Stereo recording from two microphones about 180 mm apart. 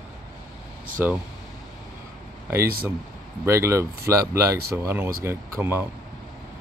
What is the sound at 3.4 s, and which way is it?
Speech, 15° right (ahead or behind).